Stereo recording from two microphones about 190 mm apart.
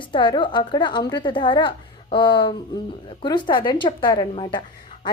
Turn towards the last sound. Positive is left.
turn(degrees=25)  # may be behind; listen again after turning